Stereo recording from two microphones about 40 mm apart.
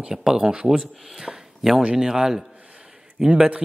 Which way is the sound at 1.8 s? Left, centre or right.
Right.